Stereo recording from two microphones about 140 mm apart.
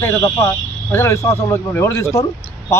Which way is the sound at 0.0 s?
15° left (ahead or behind).